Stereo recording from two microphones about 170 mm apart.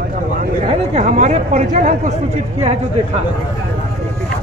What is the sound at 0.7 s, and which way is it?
Speech, 40° right (ahead or behind).